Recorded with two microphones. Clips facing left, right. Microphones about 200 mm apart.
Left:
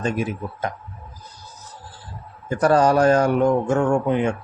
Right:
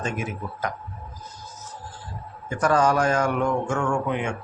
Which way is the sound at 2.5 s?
35° left (ahead or behind).